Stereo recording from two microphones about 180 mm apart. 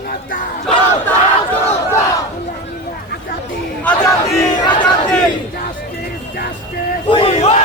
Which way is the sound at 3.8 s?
5° left (ahead or behind).